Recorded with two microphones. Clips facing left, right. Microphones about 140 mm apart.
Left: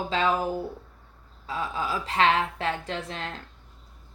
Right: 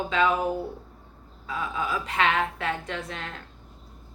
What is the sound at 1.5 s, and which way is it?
Speech, 30° left (ahead or behind).